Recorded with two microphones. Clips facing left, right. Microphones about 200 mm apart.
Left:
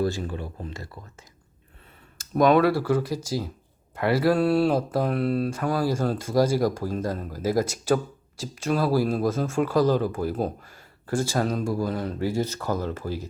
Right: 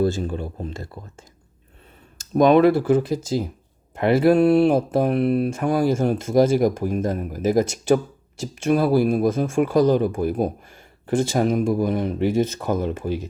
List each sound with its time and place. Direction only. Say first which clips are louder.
0.0 s speech: right 5 dB; 25° right (ahead or behind)
2.3 s speech: right 4 dB; 25° right (ahead or behind)